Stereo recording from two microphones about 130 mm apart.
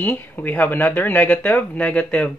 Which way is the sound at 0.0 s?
10° left (ahead or behind).